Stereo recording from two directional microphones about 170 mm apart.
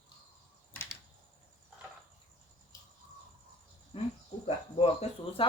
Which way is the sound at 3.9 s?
35° left (ahead or behind).